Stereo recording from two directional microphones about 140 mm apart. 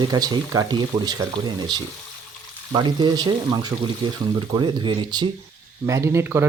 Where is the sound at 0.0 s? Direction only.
30° right (ahead or behind).